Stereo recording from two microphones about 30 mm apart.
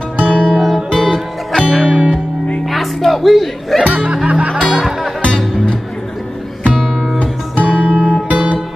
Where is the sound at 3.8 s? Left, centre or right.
Right.